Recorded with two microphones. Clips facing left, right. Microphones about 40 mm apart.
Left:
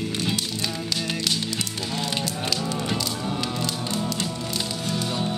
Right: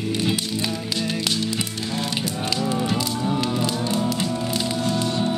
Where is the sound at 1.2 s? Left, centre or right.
Centre.